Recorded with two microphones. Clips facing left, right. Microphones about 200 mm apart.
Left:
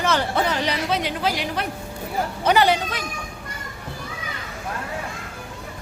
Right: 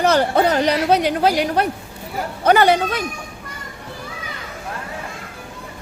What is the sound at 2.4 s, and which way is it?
Speech, 50° right (ahead or behind).